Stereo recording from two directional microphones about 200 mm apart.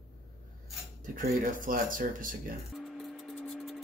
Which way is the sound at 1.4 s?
45° right (ahead or behind).